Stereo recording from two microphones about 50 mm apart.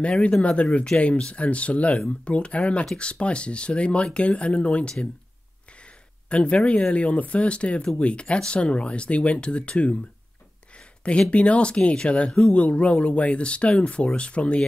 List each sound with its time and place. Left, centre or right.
0.0 s speech: left
6.2 s speech: left
11.1 s speech: left